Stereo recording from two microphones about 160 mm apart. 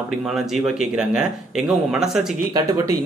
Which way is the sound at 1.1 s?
5° right (ahead or behind).